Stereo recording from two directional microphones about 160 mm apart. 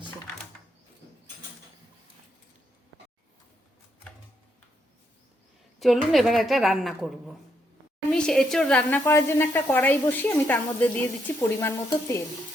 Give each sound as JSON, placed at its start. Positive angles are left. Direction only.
{"t": 5.8, "sound": "a woman's voice", "side_deg": 0}
{"t": 9.0, "sound": "speech", "side_deg": 15}